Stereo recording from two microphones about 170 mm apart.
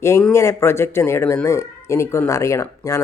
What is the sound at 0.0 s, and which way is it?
Speech, 15° left (ahead or behind).